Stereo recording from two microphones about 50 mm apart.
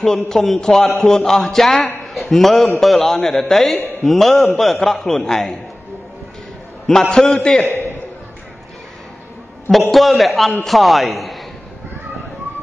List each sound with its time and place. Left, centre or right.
0.0 s a man's voice: centre
6.9 s a man's voice: centre
7.2 s a man's voice: left
9.7 s a man's voice: centre